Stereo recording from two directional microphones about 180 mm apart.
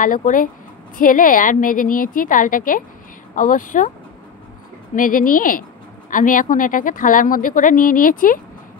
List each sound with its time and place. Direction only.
0.0 s a woman's voice: 50° left (ahead or behind)
4.9 s a woman's voice: 50° left (ahead or behind)